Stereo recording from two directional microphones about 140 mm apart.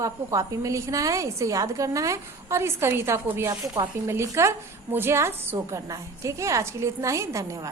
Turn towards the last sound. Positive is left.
turn(degrees=-20)  # may be behind; listen again after turning